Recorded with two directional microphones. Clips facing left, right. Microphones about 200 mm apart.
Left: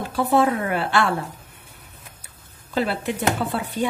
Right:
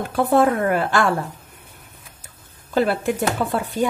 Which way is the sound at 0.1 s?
55° right (ahead or behind).